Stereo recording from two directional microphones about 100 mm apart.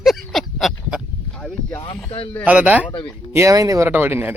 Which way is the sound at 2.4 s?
15° right (ahead or behind).